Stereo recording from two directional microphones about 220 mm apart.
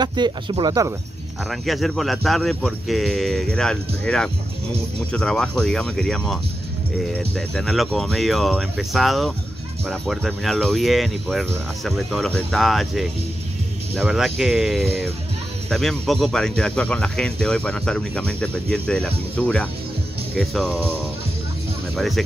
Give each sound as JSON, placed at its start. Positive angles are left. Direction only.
{"t": 0.0, "sound": "speech", "side_deg": -20}
{"t": 1.5, "sound": "speech", "side_deg": 0}
{"t": 21.9, "sound": "speech", "side_deg": 0}